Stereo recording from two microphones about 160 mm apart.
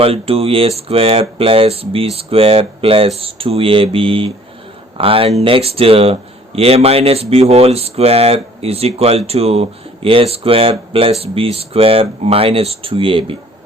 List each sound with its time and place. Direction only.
0.0 s speech: 35° right (ahead or behind)